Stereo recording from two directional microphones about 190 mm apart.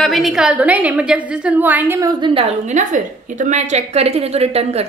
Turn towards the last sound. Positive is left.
turn(degrees=-35)  # may be behind; listen again after turning